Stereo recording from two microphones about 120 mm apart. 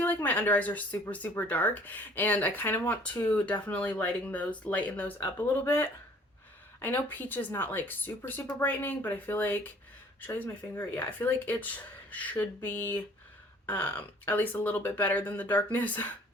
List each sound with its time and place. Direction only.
0.0 s speech: 15° left (ahead or behind)